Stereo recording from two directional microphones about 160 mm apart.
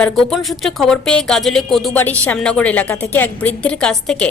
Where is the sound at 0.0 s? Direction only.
5° left (ahead or behind).